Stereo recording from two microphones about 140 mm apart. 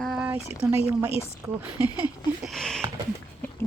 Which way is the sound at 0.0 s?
Centre (ahead or behind).